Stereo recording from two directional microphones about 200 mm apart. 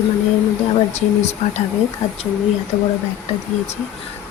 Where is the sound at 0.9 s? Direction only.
35° left (ahead or behind).